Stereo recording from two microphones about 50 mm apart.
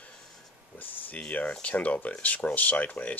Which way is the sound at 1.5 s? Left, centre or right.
Left.